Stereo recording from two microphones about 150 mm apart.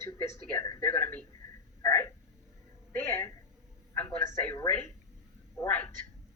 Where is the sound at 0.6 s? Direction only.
25° left (ahead or behind).